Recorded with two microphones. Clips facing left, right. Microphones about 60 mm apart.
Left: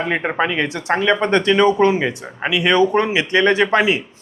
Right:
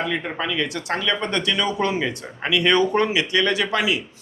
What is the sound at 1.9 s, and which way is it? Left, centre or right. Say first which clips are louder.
A man's voice: left 5 dB; left.